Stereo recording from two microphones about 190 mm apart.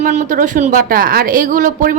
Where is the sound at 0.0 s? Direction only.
40° right (ahead or behind).